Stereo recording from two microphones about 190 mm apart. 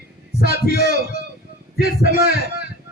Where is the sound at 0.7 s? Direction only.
50° left (ahead or behind).